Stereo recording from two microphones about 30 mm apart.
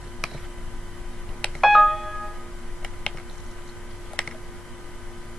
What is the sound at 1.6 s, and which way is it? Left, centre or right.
Doorbell, centre.